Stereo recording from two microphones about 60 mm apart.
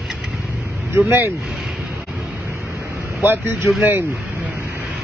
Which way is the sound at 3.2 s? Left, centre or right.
Right.